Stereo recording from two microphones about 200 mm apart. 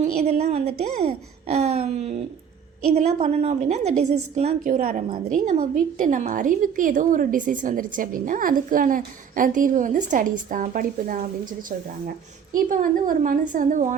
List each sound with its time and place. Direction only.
0.0 s a woman's voice: 35° right (ahead or behind)
12.5 s a woman's voice: 45° right (ahead or behind)